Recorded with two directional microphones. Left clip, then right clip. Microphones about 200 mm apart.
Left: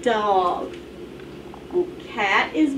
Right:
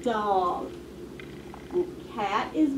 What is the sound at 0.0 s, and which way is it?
Speech, 5° right (ahead or behind).